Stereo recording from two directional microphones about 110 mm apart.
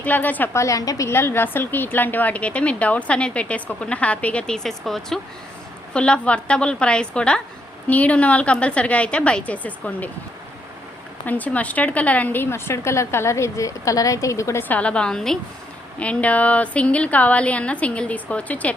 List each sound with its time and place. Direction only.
0.0 s a woman's voice: 15° left (ahead or behind)
11.3 s a woman's voice: 15° left (ahead or behind)